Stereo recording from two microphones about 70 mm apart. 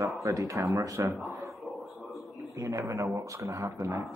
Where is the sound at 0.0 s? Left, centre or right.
Right.